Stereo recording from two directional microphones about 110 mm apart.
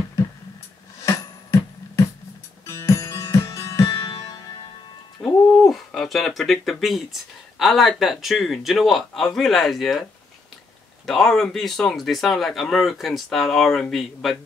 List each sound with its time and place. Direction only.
1.0 s music: 25° left (ahead or behind)
5.5 s speech: 5° left (ahead or behind)
11.1 s speech: 5° left (ahead or behind)